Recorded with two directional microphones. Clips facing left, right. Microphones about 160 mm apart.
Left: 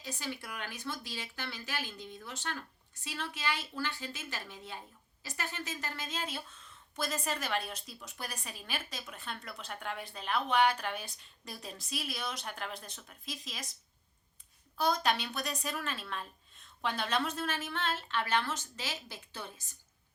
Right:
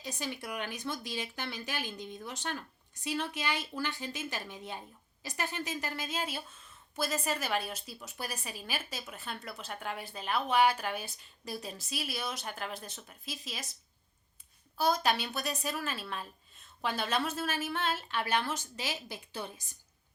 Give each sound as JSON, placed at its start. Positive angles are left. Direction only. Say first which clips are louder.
{"t": 0.0, "sound": "a woman's voice", "louder": "right 2 dB", "side_deg": -20}
{"t": 14.8, "sound": "a woman's voice", "louder": "right 1 dB", "side_deg": -5}